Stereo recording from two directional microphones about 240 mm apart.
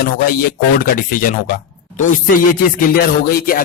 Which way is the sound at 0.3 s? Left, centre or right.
Left.